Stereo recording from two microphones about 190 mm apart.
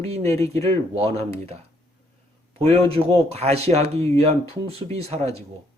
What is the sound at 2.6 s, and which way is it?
Speech, 30° right (ahead or behind).